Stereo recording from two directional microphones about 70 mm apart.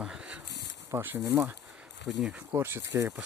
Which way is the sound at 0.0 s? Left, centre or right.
Centre.